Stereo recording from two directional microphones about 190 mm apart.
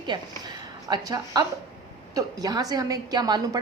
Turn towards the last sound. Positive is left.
turn(degrees=-20)  # may be behind; listen again after turning